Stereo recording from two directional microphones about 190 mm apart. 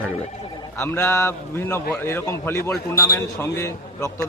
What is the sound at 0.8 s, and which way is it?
A man's voice, 15° left (ahead or behind).